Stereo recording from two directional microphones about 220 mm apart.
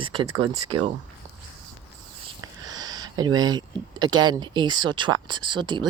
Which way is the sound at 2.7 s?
15° right (ahead or behind).